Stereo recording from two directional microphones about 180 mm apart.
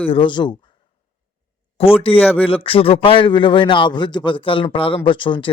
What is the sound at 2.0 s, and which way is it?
A man's voice, 30° left (ahead or behind).